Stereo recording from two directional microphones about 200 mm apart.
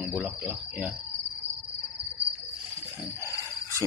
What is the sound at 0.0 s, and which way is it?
Cricket, 5° right (ahead or behind).